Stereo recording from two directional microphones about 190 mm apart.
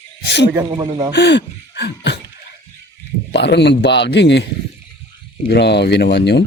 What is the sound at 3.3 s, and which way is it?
Speech, 65° left (ahead or behind).